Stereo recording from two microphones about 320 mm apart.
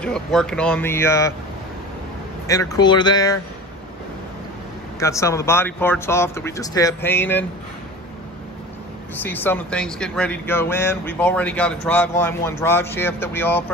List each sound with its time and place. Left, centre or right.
0.0 s speech: centre
2.4 s speech: centre
5.0 s speech: centre
9.2 s speech: centre